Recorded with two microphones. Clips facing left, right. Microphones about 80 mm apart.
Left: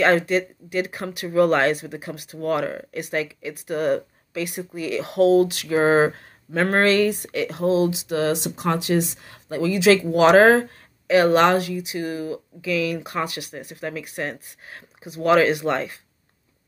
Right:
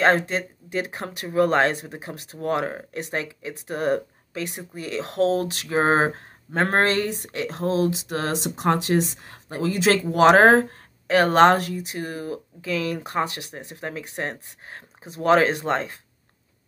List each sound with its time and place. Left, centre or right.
0.0 s speech: right